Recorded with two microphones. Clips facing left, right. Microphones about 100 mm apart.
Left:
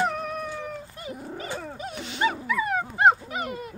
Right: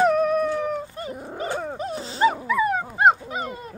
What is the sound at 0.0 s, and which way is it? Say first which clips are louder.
Cat: right 9 dB; 60° right (ahead or behind).